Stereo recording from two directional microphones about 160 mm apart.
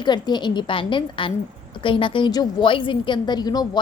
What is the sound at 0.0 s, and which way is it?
A woman's voice, 30° left (ahead or behind).